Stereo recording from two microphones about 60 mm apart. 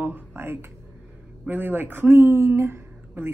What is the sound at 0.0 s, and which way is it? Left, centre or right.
Speech, right.